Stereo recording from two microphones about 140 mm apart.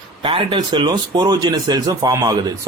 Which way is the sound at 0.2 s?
40° right (ahead or behind).